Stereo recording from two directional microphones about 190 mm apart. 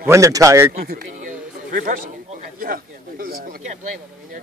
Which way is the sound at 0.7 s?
55° right (ahead or behind).